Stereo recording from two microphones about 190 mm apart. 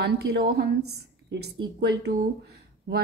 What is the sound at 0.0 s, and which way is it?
Speech, 60° right (ahead or behind).